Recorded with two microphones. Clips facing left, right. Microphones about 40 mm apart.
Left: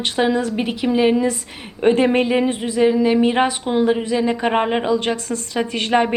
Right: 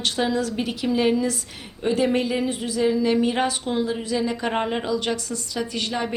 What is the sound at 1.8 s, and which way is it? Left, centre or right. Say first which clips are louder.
A woman's voice: left 6 dB; left.